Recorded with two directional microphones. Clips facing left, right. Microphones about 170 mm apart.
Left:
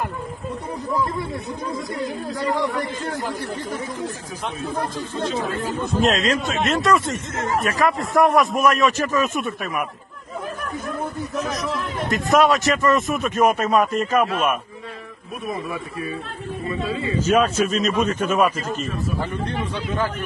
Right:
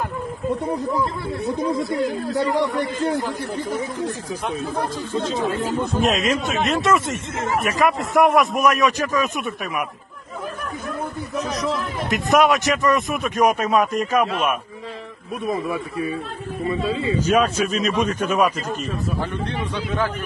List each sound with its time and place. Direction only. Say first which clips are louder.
3.0 s speech: right 5 dB; 10° right (ahead or behind)
5.9 s a man's voice: left 2 dB; centre (ahead or behind)
6.8 s speech: even; 20° right (ahead or behind)
7.6 s a man's voice: right 2 dB; centre (ahead or behind)
9.1 s speech: left 1 dB; 10° right (ahead or behind)
9.4 s a man's voice: left 1 dB; centre (ahead or behind)
11.7 s a man's voice: even; centre (ahead or behind)
15.4 s speech: right 4 dB; 30° right (ahead or behind)
17.6 s a man's voice: left 1 dB; centre (ahead or behind)
19.5 s a man's voice: even; centre (ahead or behind)